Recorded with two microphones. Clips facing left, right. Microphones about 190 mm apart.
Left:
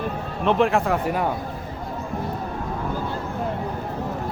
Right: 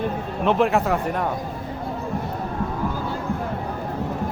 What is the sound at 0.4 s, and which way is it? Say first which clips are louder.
Speech: even; centre (ahead or behind).